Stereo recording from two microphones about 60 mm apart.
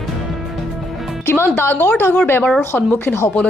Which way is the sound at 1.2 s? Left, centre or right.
Left.